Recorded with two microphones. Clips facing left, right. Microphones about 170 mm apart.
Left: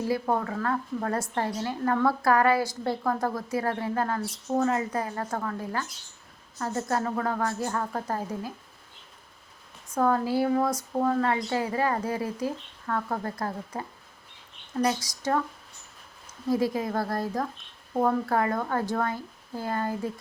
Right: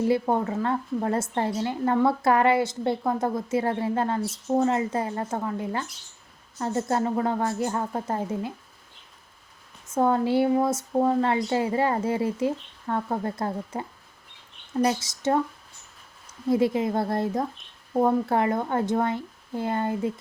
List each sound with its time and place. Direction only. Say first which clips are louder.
0.0 s a woman's voice: right 4 dB; 25° right (ahead or behind)
9.9 s a woman's voice: right 3 dB; 25° right (ahead or behind)
16.5 s a woman's voice: right 3 dB; 25° right (ahead or behind)
17.9 s a woman's voice: right 3 dB; 15° right (ahead or behind)